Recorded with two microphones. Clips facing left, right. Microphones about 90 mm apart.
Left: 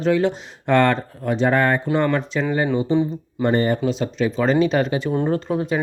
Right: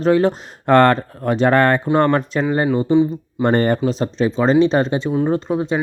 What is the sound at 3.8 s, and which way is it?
Speech, 40° right (ahead or behind).